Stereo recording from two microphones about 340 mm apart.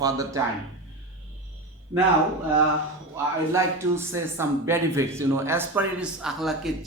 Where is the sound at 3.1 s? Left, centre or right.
Centre.